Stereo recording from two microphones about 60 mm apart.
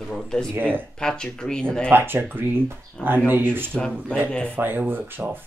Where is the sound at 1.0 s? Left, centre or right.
Centre.